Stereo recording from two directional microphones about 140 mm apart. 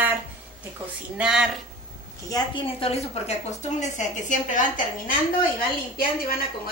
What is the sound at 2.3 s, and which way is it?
A woman's voice, 40° left (ahead or behind).